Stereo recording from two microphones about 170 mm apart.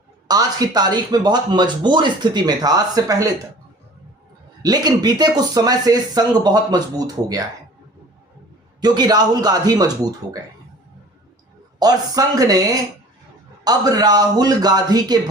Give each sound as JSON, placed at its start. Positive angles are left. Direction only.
{"t": 0.3, "sound": "speech", "side_deg": -20}
{"t": 4.6, "sound": "speech", "side_deg": -25}
{"t": 8.8, "sound": "speech", "side_deg": -25}
{"t": 11.8, "sound": "speech", "side_deg": -20}